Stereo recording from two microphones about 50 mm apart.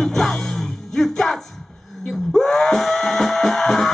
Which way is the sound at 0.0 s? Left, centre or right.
Centre.